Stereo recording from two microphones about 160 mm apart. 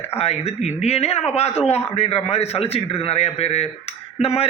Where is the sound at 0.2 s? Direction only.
40° left (ahead or behind).